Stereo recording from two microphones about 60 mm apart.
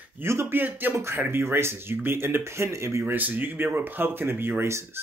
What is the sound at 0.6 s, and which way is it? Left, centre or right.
Speech, right.